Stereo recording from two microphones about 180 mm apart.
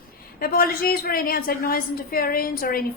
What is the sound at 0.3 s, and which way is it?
A woman's voice, 55° left (ahead or behind).